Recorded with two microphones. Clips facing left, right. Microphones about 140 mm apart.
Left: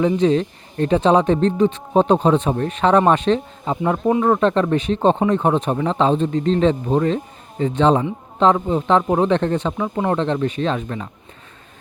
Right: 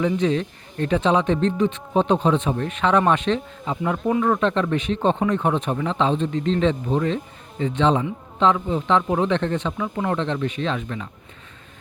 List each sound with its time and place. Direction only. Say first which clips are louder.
0.0 s speech: left 4 dB; 35° left (ahead or behind)